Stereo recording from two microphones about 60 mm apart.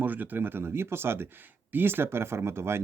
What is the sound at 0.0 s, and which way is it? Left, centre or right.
Speech, right.